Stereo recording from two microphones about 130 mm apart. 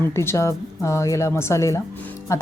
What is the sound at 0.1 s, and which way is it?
Speech, 20° left (ahead or behind).